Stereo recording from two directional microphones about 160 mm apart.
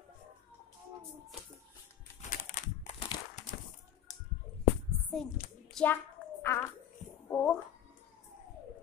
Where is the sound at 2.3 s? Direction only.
50° left (ahead or behind).